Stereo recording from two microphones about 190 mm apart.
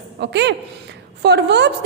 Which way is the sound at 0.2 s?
65° right (ahead or behind).